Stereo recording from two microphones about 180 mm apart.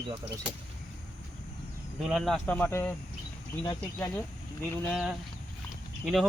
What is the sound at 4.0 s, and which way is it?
Speech, 10° left (ahead or behind).